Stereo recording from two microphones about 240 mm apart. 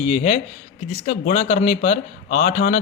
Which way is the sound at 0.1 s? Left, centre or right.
Left.